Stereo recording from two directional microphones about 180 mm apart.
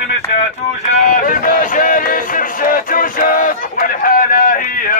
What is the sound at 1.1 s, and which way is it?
Music, 45° left (ahead or behind).